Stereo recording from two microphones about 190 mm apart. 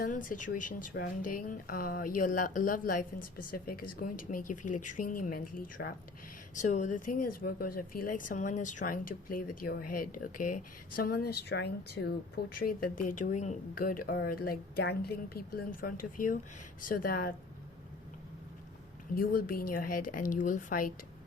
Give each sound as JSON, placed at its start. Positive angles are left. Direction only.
{"t": 0.0, "sound": "speech", "side_deg": 45}
{"t": 19.1, "sound": "speech", "side_deg": 50}